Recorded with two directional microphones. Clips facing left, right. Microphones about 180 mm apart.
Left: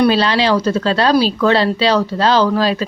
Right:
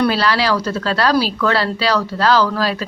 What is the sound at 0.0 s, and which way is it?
Speech, 20° left (ahead or behind).